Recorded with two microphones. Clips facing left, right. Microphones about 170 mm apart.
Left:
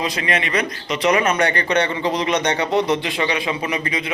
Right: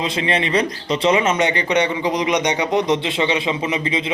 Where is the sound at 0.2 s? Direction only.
30° right (ahead or behind).